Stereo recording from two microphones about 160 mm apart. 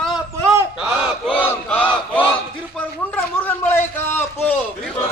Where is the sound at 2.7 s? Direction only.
10° left (ahead or behind).